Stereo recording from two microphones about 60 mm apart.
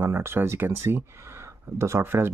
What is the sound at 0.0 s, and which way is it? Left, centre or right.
Speech, right.